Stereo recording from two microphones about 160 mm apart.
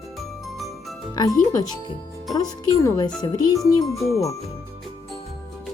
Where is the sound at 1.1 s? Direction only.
25° left (ahead or behind).